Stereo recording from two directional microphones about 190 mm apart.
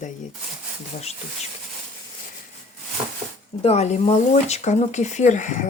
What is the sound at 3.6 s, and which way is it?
Speech, 35° left (ahead or behind).